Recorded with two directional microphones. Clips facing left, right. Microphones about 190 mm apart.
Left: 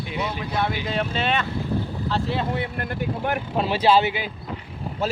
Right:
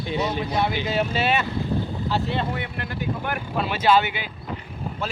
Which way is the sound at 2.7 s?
45° left (ahead or behind).